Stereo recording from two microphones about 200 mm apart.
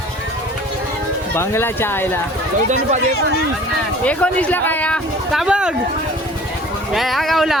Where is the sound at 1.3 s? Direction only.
10° left (ahead or behind).